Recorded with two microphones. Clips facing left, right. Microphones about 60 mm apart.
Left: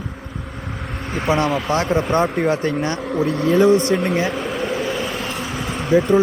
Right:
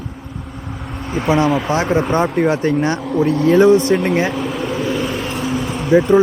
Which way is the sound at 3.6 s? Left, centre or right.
Centre.